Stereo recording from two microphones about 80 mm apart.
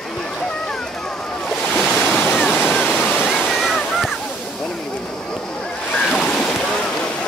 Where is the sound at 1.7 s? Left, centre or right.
Centre.